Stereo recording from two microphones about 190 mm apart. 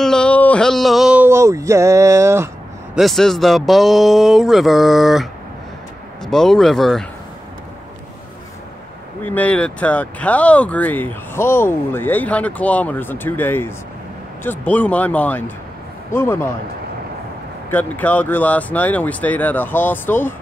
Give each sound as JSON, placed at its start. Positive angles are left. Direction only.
{"t": 0.0, "sound": "a sound", "side_deg": 5}
{"t": 2.9, "sound": "speech", "side_deg": 0}
{"t": 9.2, "sound": "speech", "side_deg": 10}
{"t": 17.6, "sound": "speech", "side_deg": 10}